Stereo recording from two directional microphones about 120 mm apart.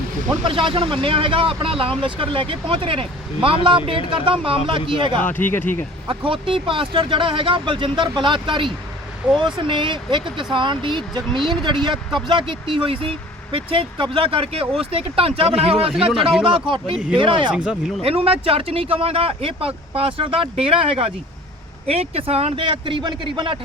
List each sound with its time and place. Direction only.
0.4 s speech: 45° right (ahead or behind)
5.2 s speech: 15° left (ahead or behind)
6.1 s speech: 45° right (ahead or behind)
9.2 s speech: 10° right (ahead or behind)
9.6 s speech: 45° right (ahead or behind)
17.5 s speech: 10° right (ahead or behind)
18.0 s speech: 55° right (ahead or behind)